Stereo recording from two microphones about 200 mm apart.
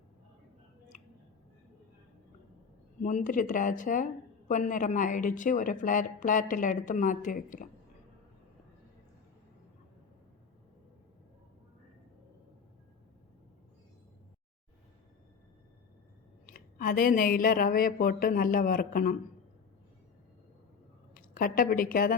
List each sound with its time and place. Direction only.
3.0 s speech: 40° left (ahead or behind)
16.5 s speech: 45° left (ahead or behind)
21.1 s a woman's voice: 45° left (ahead or behind)